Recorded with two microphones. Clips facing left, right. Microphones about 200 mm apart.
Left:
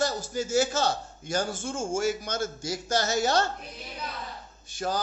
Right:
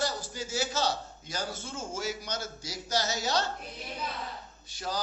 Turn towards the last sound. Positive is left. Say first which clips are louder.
# left 6 dB
turn(degrees=50)  # may be behind; listen again after turning